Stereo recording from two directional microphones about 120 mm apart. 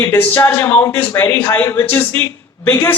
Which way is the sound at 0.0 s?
20° left (ahead or behind).